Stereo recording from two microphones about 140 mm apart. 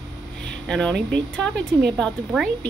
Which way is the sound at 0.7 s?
5° left (ahead or behind).